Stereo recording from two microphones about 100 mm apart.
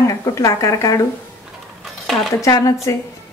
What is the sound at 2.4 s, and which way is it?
Speech, 35° left (ahead or behind).